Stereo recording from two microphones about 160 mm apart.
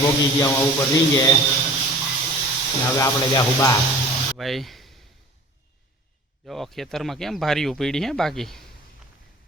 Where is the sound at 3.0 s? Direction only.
20° left (ahead or behind).